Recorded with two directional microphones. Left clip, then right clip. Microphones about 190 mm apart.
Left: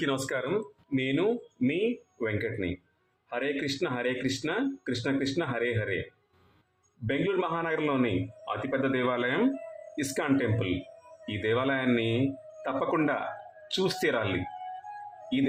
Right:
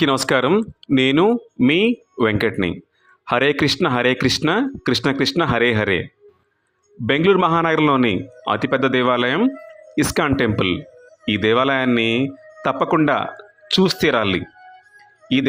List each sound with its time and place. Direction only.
0.0 s speech: 45° right (ahead or behind)
7.1 s a man's voice: 45° right (ahead or behind)